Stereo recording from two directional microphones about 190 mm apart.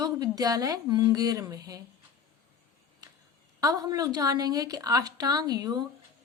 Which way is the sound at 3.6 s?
20° right (ahead or behind).